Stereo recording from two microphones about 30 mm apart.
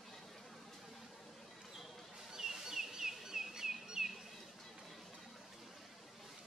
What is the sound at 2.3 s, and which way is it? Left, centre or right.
Bird, centre.